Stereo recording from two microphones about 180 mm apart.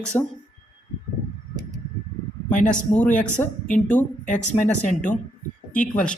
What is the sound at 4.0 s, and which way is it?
Speech, 40° left (ahead or behind).